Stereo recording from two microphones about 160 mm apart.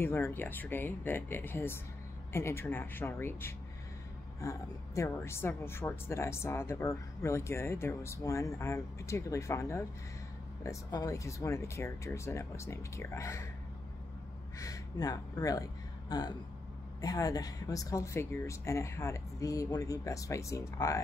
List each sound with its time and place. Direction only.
0.0 s speech: 15° left (ahead or behind)
14.6 s a woman's voice: 20° left (ahead or behind)